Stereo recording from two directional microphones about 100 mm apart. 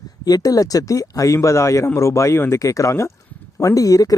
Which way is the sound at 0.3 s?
40° left (ahead or behind).